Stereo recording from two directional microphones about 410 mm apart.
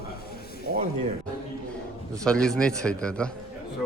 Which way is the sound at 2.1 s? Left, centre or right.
Centre.